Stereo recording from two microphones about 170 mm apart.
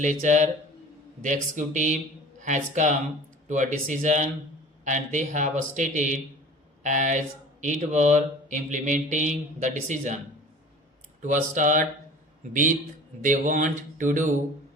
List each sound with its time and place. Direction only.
0.0 s mantra: 45° right (ahead or behind)
11.2 s mantra: 50° right (ahead or behind)
13.2 s mantra: 50° right (ahead or behind)